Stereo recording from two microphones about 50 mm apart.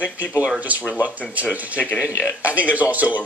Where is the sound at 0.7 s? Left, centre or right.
Right.